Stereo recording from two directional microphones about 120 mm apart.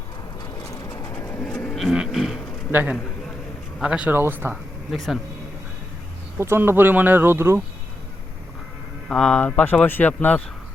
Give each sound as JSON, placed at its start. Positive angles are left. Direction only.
{"t": 0.7, "sound": "train", "side_deg": 30}
{"t": 1.1, "sound": "bird", "side_deg": 15}
{"t": 1.7, "sound": "vehicle", "side_deg": -5}
{"t": 2.1, "sound": "a sound", "side_deg": -5}
{"t": 2.7, "sound": "speech", "side_deg": -10}
{"t": 4.9, "sound": "speech", "side_deg": 0}
{"t": 6.4, "sound": "speech", "side_deg": -20}
{"t": 9.0, "sound": "speech", "side_deg": 5}